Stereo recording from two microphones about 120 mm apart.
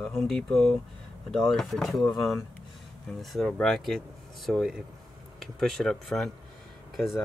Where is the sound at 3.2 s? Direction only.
Centre (ahead or behind).